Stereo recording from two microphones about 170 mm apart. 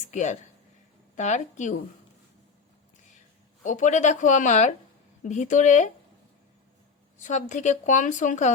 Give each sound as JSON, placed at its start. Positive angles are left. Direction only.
{"t": 0.0, "sound": "speech", "side_deg": 45}
{"t": 3.6, "sound": "speech", "side_deg": 45}
{"t": 7.2, "sound": "speech", "side_deg": 45}